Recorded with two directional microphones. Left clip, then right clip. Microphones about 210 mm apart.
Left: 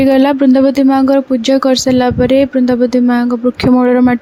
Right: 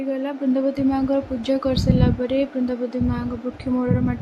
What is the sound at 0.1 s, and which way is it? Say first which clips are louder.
Speech: left 14 dB; 50° left (ahead or behind).